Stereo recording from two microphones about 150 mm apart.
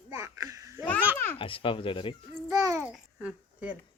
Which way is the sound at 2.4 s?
20° right (ahead or behind).